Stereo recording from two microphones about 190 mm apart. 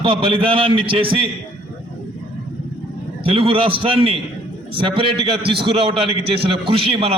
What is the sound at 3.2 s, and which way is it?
A man's voice, 30° right (ahead or behind).